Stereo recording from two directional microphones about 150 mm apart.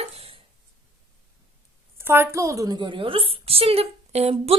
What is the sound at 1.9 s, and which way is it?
A woman's voice, 15° right (ahead or behind).